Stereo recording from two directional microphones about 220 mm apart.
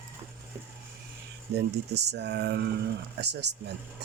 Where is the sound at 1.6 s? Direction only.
50° right (ahead or behind).